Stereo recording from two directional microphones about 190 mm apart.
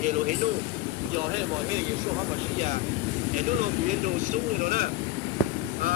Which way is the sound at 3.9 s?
40° right (ahead or behind).